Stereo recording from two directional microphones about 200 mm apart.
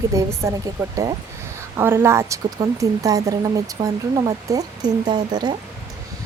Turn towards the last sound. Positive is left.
turn(degrees=-20)  # may be behind; listen again after turning